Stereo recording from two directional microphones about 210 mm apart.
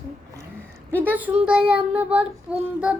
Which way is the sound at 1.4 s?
5° right (ahead or behind).